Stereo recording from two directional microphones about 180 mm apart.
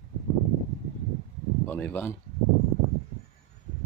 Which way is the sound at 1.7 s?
10° left (ahead or behind).